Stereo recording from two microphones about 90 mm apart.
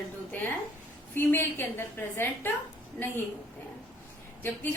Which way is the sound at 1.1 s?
20° left (ahead or behind).